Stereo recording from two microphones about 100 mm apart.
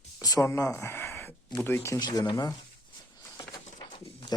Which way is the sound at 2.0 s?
45° left (ahead or behind).